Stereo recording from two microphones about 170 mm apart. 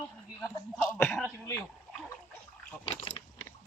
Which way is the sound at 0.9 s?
10° left (ahead or behind).